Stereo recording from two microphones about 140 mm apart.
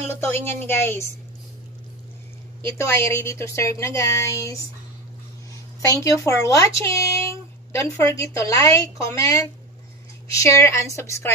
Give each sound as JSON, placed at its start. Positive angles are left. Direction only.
{"t": 0.1, "sound": "a woman's voice", "side_deg": 15}
{"t": 2.6, "sound": "speech", "side_deg": 20}
{"t": 5.9, "sound": "speech", "side_deg": 20}